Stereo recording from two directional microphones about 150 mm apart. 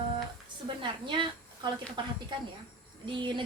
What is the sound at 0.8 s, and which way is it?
A woman's voice, 30° right (ahead or behind).